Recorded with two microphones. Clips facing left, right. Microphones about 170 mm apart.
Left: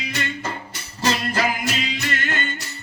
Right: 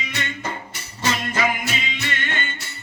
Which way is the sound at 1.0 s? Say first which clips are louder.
Left 1 dB; 35° left (ahead or behind).